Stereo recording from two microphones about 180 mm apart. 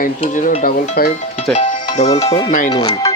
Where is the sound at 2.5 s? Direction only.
45° left (ahead or behind).